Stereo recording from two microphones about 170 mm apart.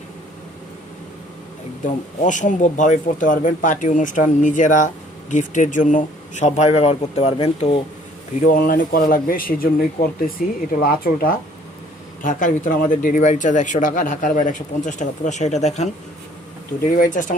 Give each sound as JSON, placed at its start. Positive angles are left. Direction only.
{"t": 1.8, "sound": "speech", "side_deg": 50}
{"t": 8.4, "sound": "speech", "side_deg": 55}